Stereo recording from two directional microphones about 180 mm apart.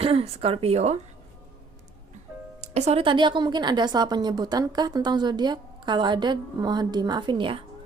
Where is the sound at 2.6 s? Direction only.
40° right (ahead or behind).